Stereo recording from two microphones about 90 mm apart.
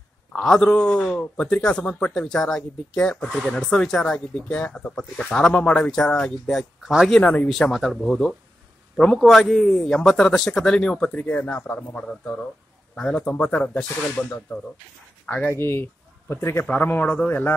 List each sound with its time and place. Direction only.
0.3 s a man's voice: 5° left (ahead or behind)